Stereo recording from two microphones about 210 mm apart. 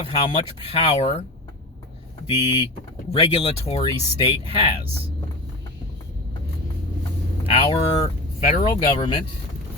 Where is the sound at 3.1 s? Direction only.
30° left (ahead or behind).